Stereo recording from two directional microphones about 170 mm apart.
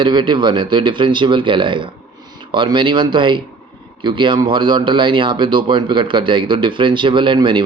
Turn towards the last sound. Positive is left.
turn(degrees=-30)  # may be behind; listen again after turning